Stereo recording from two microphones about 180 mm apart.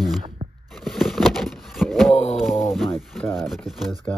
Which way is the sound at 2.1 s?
35° left (ahead or behind).